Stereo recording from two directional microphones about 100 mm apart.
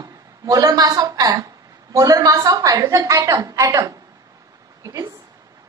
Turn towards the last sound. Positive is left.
turn(degrees=-40)  # may be behind; listen again after turning